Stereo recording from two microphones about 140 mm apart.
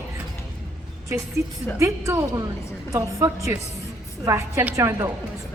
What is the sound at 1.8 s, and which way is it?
A woman's voice, 20° right (ahead or behind).